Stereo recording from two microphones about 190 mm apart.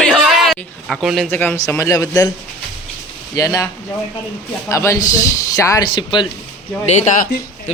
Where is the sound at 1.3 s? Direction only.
10° left (ahead or behind).